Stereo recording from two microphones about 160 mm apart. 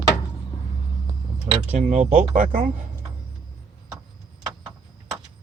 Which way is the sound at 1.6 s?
45° right (ahead or behind).